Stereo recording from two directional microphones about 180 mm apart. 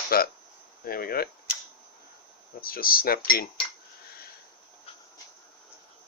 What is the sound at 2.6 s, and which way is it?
Speech, 55° left (ahead or behind).